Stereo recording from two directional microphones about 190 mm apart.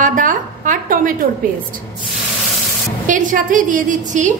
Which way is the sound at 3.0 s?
45° right (ahead or behind).